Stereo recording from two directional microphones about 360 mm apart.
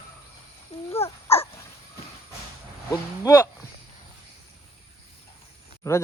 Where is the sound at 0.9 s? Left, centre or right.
Centre.